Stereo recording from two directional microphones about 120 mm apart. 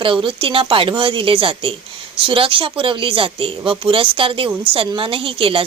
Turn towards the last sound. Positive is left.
turn(degrees=-50)  # may be behind; listen again after turning